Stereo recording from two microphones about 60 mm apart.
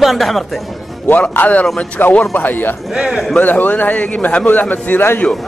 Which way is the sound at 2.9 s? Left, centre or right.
Centre.